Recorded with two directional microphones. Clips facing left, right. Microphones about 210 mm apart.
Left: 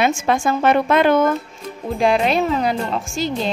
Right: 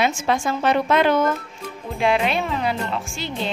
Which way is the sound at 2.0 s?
40° left (ahead or behind).